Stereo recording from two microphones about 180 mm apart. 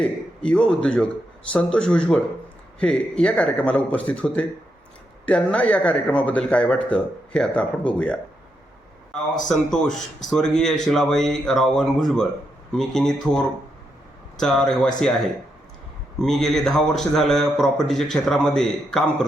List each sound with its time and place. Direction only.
0.0 s a man's voice: 5° left (ahead or behind)
9.5 s a man's voice: 5° left (ahead or behind)
16.1 s a man's voice: centre (ahead or behind)